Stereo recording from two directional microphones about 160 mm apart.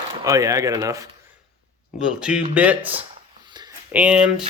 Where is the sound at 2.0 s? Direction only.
5° right (ahead or behind).